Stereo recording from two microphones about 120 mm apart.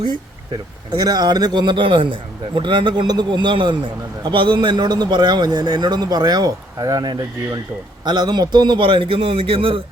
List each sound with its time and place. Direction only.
0.9 s a man's voice: 35° right (ahead or behind); by 9.8 s 50° right (ahead or behind)